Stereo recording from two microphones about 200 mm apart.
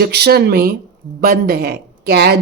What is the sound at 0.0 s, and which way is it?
Speech, 55° right (ahead or behind).